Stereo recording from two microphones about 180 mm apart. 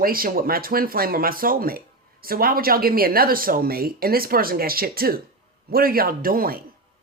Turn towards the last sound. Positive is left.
turn(degrees=-55)  # may be behind; listen again after turning